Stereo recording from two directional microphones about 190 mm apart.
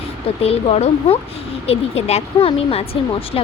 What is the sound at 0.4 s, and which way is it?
Speech, 35° left (ahead or behind).